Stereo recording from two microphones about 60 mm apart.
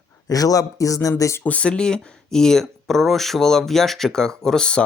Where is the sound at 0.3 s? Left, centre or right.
Left.